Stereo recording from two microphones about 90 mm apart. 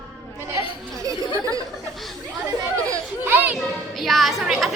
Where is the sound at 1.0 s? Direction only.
40° right (ahead or behind).